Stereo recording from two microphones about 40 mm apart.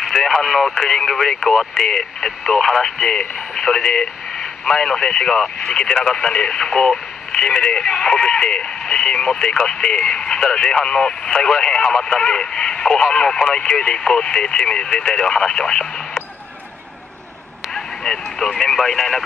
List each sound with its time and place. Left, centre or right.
0.1 s speech: centre
17.7 s a sound: centre
18.6 s speech: centre